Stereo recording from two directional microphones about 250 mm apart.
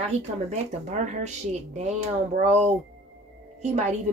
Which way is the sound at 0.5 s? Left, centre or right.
Right.